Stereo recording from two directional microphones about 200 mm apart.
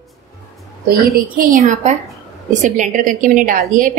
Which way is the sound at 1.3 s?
40° right (ahead or behind).